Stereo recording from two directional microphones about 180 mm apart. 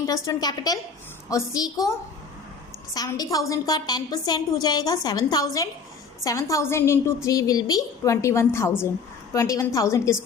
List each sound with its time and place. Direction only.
0.0 s a woman's voice: 20° left (ahead or behind)